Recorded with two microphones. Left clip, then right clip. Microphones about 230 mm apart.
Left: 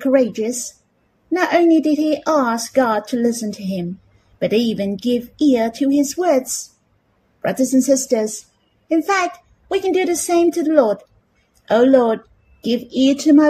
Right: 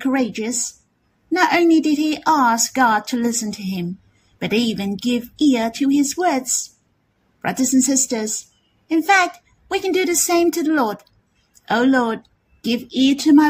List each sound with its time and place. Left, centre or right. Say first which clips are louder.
0.0 s speech: left 5 dB; right
1.5 s speech: left 5 dB; right
7.4 s a child's voice: left 3 dB; right